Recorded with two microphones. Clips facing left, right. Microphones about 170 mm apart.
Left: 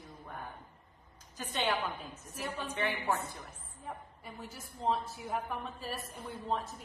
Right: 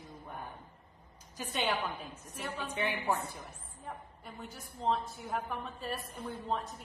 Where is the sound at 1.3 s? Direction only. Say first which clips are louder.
Even; 10° right (ahead or behind).